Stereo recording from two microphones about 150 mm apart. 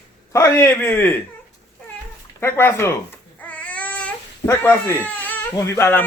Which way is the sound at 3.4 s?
10° left (ahead or behind).